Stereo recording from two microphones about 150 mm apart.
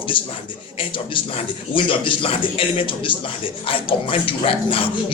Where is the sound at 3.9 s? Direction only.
35° left (ahead or behind).